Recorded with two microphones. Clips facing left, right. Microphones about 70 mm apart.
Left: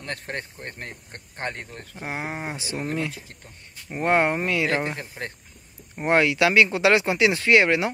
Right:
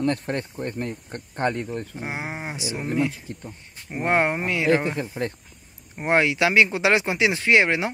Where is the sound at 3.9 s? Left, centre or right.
Centre.